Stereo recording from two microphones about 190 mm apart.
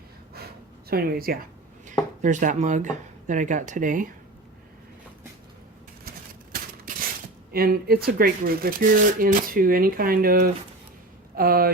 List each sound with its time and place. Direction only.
0.9 s speech: 50° right (ahead or behind)
6.5 s a sound: 50° right (ahead or behind)
7.5 s speech: 50° right (ahead or behind)